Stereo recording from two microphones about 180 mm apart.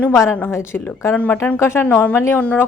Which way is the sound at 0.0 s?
10° left (ahead or behind).